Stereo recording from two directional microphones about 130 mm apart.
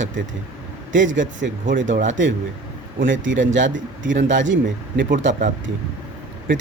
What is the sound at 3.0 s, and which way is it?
Speech, 85° right.